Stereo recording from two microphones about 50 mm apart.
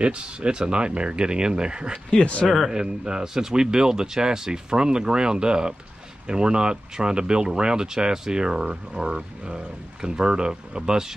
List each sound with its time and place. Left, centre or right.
0.0 s speech: right
2.4 s speech: centre
2.7 s speech: centre